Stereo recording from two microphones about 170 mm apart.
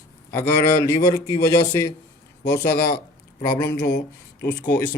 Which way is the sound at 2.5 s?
65° left (ahead or behind).